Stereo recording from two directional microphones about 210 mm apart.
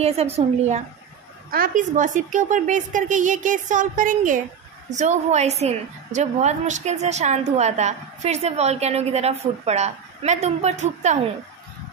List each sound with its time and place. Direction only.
0.0 s a woman's voice: 30° right (ahead or behind)